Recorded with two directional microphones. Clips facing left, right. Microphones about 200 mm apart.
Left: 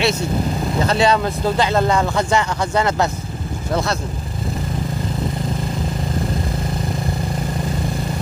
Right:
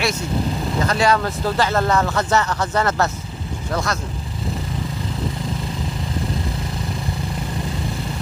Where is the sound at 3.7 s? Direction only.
25° left (ahead or behind).